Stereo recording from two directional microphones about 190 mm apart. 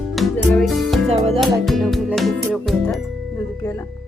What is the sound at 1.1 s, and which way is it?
Music, 35° right (ahead or behind).